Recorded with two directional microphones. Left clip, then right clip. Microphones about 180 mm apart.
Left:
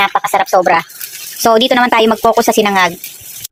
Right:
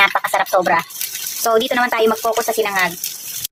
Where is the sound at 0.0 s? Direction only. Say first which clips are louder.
Left 3 dB; 15° left (ahead or behind).